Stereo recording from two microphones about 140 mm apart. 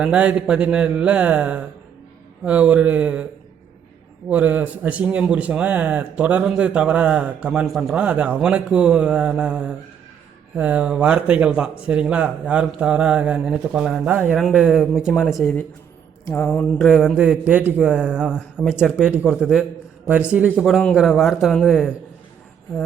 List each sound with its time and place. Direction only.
0.0 s a man's voice: 10° right (ahead or behind)
4.3 s a man's voice: 10° right (ahead or behind)
16.2 s speech: 20° left (ahead or behind)
17.2 s a man's voice: 10° right (ahead or behind)